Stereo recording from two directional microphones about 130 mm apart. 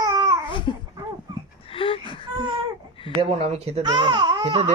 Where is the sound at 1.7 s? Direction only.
45° left (ahead or behind).